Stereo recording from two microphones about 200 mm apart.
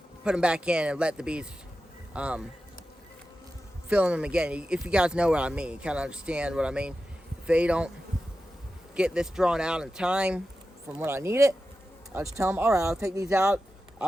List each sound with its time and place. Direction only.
0.3 s speech: 5° right (ahead or behind)
3.8 s speech: 5° right (ahead or behind)
9.0 s speech: 5° right (ahead or behind)
13.3 s speech: 5° right (ahead or behind)